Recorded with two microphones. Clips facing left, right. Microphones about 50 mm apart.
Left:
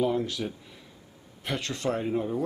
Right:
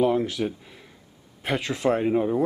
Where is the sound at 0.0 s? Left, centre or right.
Centre.